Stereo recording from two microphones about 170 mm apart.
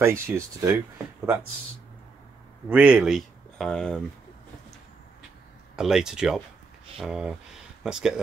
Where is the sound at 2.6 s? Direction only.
5° right (ahead or behind).